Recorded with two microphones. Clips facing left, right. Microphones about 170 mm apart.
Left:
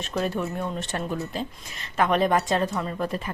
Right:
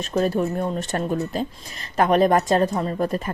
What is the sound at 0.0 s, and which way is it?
Speech, 40° right (ahead or behind).